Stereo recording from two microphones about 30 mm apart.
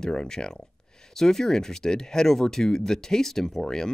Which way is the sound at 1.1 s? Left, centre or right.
Centre.